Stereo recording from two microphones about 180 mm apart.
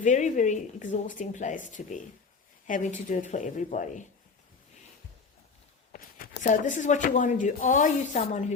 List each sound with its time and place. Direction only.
0.0 s speech: 45° left (ahead or behind)
5.9 s speech: 50° left (ahead or behind)